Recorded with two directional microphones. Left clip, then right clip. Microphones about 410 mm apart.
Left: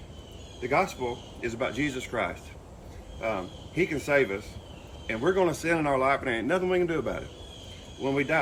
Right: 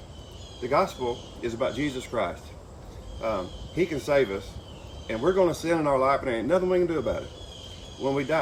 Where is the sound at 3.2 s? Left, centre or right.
Centre.